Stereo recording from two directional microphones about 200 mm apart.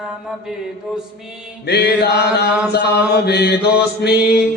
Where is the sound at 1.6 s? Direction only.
55° left (ahead or behind).